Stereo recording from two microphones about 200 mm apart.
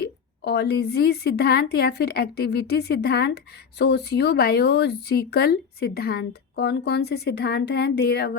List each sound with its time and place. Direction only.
0.0 s a woman's voice: 55° left (ahead or behind)